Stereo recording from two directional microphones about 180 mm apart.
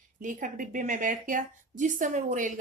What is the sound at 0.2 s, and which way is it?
Speech, 45° right (ahead or behind).